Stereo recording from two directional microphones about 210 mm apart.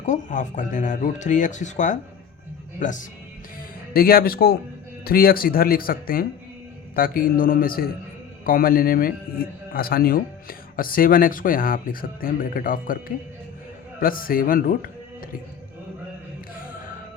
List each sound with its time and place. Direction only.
0.0 s a man's voice: 35° left (ahead or behind)